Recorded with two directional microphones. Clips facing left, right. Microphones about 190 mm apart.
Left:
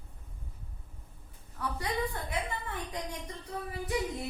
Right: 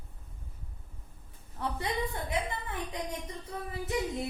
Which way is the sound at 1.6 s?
25° right (ahead or behind).